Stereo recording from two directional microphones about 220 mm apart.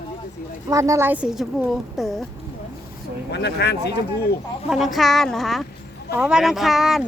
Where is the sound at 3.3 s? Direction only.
50° left (ahead or behind).